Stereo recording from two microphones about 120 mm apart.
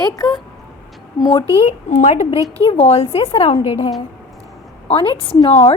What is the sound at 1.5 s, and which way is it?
Speech, 65° left (ahead or behind).